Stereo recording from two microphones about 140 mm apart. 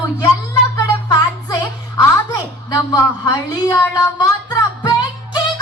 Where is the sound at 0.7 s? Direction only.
30° left (ahead or behind).